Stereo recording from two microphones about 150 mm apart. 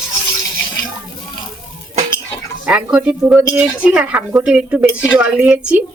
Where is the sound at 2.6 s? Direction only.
5° right (ahead or behind).